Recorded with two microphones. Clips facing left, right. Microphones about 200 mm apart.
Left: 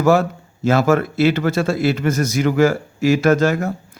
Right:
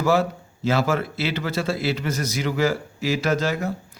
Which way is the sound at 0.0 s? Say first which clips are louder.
Left 5 dB; 50° left (ahead or behind).